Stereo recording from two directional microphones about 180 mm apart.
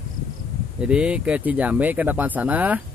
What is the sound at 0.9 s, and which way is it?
Speech, 5° right (ahead or behind).